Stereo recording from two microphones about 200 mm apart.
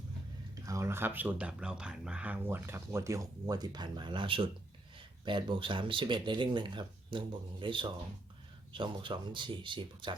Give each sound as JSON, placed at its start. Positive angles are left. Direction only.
{"t": 0.6, "sound": "speech", "side_deg": -15}